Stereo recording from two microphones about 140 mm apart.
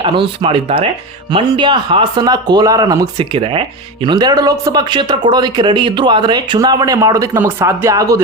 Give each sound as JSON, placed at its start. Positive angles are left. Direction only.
{"t": 0.0, "sound": "speech", "side_deg": -35}